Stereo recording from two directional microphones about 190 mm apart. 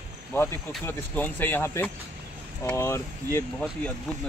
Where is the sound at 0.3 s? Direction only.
10° left (ahead or behind).